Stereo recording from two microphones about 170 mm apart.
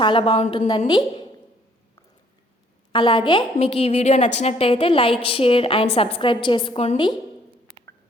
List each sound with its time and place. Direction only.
0.0 s a woman's voice: 30° left (ahead or behind)
2.9 s a woman's voice: 30° left (ahead or behind)